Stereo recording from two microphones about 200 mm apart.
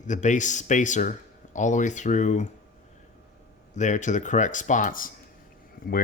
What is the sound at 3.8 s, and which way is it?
Speech, 40° left (ahead or behind).